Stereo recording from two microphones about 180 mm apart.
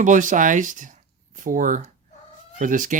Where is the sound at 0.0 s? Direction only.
45° right (ahead or behind).